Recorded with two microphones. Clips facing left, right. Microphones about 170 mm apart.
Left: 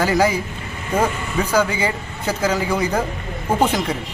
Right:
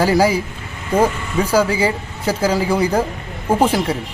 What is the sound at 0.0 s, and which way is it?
Speech, 10° right (ahead or behind).